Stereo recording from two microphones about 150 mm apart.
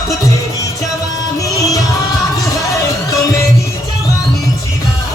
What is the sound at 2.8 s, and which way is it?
Music, 20° left (ahead or behind).